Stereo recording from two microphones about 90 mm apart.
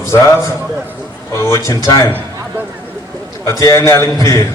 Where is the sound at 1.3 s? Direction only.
35° left (ahead or behind).